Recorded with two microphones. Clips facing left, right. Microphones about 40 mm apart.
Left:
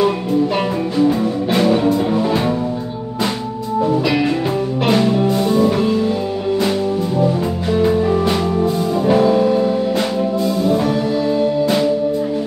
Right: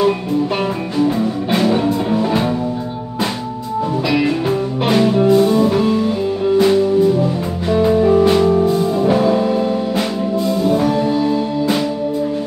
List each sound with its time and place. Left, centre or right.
0.9 s music: centre
4.8 s music: centre
7.7 s music: centre